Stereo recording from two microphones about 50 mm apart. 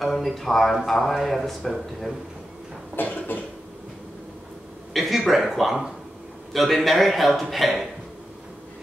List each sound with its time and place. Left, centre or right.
0.0 s a man's voice: centre
3.0 s cough: left
4.9 s a man's voice: centre